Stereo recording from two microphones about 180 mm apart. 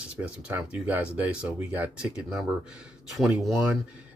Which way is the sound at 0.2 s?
5° right (ahead or behind).